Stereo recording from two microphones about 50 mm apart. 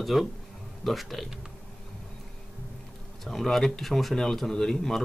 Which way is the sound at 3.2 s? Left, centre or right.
Centre.